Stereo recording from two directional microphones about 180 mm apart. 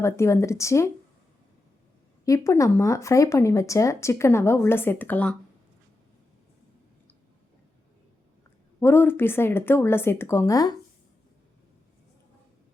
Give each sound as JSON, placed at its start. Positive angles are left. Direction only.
{"t": 0.0, "sound": "speech", "side_deg": 15}
{"t": 2.2, "sound": "speech", "side_deg": 15}
{"t": 8.8, "sound": "speech", "side_deg": 10}